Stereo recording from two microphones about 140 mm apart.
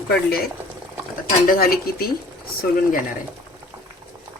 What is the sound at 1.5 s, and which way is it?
Speech, 90° left.